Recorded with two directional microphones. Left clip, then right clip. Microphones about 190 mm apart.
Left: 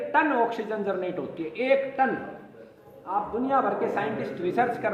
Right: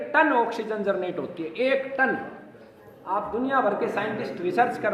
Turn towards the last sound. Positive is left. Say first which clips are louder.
# right 2 dB
turn(degrees=20)  # may be behind; listen again after turning